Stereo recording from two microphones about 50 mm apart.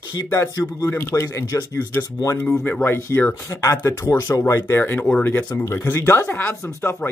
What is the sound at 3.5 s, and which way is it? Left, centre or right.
Speech, left.